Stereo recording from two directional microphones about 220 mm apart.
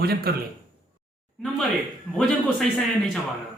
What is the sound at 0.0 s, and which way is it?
Speech, 45° right (ahead or behind).